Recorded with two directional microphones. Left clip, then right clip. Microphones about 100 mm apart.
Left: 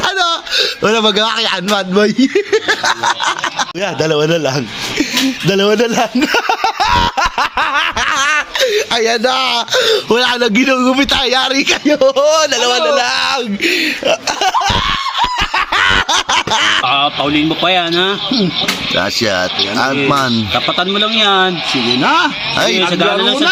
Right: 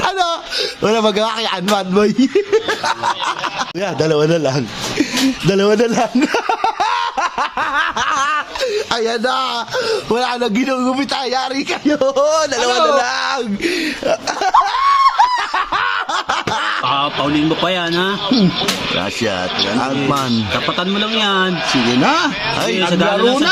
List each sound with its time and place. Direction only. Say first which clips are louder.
0.0 s a sound: left 3 dB; centre (ahead or behind)
1.7 s speech: left 1 dB; 5° right (ahead or behind)
4.0 s a man's voice: left 1 dB; 10° right (ahead or behind)
5.5 s a sound: left 1 dB; 10° right (ahead or behind)
8.3 s speech: left 5 dB; 15° left (ahead or behind)
9.7 s speech: left 6 dB; 20° left (ahead or behind)
11.9 s speech: left 3 dB; 5° right (ahead or behind)
15.8 s snicker: left 6 dB; 25° left (ahead or behind)
16.9 s speech: left 3 dB; 30° right (ahead or behind)
20.3 s speech: left 3 dB; 35° right (ahead or behind)
21.7 s speech: left 1 dB; 45° right (ahead or behind)
22.8 s speech: left 2 dB; 20° right (ahead or behind)